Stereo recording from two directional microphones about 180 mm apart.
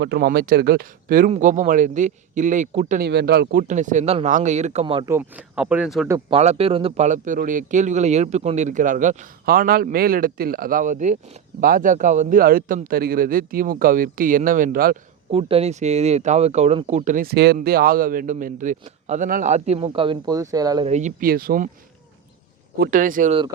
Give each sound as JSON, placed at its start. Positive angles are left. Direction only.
{"t": 0.0, "sound": "a man's voice", "side_deg": -60}
{"t": 3.1, "sound": "speech", "side_deg": -65}
{"t": 5.0, "sound": "speech", "side_deg": -10}
{"t": 6.3, "sound": "a man's voice", "side_deg": -35}
{"t": 15.3, "sound": "speech", "side_deg": -35}
{"t": 19.9, "sound": "speech", "side_deg": -25}
{"t": 20.8, "sound": "a man's voice", "side_deg": -40}
{"t": 22.8, "sound": "a man's voice", "side_deg": -50}